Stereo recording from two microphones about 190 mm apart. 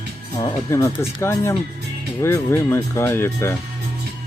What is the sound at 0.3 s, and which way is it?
Speech, 15° left (ahead or behind).